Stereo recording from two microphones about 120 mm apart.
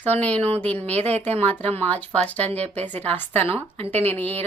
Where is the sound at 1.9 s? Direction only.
15° left (ahead or behind).